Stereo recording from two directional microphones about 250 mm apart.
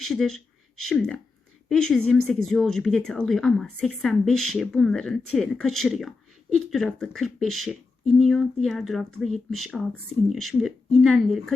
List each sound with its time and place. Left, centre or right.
0.0 s speech: centre